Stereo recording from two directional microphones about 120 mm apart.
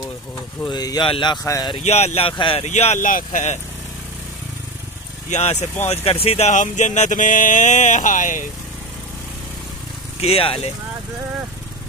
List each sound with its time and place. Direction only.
0.7 s speech: 35° left (ahead or behind)
1.4 s speech: 25° left (ahead or behind)
1.8 s speech: 65° left (ahead or behind); by 2.6 s 45° left (ahead or behind)
2.6 s speech: 75° left (ahead or behind)
5.3 s speech: 70° left (ahead or behind)
5.9 s speech: 55° left (ahead or behind); by 8.5 s 90° left
10.2 s speech: 50° left (ahead or behind)